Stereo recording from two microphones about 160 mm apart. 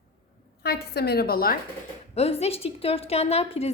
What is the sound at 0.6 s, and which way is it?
Speech, 85° left.